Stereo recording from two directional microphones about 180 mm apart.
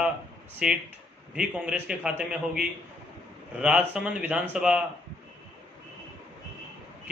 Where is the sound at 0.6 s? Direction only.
5° right (ahead or behind).